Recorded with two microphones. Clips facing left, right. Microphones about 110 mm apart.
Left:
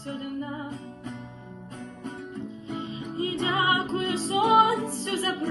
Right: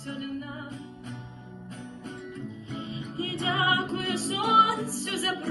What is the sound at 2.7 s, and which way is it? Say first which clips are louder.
Music: left 4 dB; 30° left (ahead or behind).